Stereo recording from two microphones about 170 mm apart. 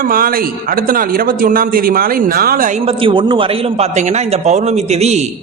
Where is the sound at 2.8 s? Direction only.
30° right (ahead or behind).